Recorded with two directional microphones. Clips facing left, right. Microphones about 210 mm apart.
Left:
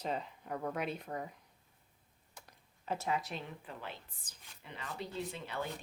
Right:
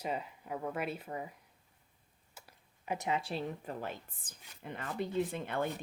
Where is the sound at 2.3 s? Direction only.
10° right (ahead or behind).